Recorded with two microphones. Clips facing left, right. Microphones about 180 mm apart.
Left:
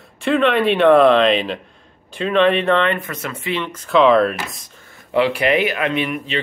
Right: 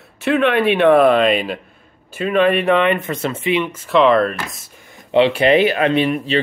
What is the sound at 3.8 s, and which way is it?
Speech, centre (ahead or behind).